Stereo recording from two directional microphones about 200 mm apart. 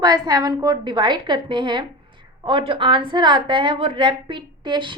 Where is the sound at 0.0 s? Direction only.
20° right (ahead or behind).